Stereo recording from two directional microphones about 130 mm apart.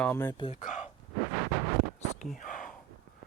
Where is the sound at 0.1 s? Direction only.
20° left (ahead or behind).